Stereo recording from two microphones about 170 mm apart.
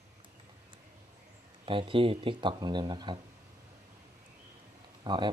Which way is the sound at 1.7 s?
30° right (ahead or behind).